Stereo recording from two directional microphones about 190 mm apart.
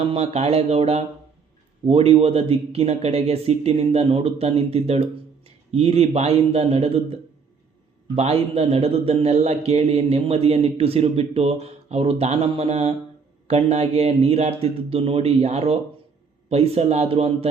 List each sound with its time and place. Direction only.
0.0 s a man's voice: 30° right (ahead or behind)